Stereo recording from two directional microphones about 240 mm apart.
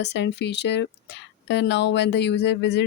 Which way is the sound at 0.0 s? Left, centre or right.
Left.